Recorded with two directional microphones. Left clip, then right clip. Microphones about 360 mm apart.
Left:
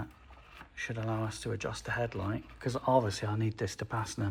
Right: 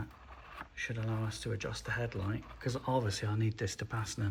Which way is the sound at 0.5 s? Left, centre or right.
Centre.